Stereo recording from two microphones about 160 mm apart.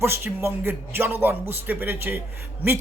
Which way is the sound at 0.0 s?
15° right (ahead or behind).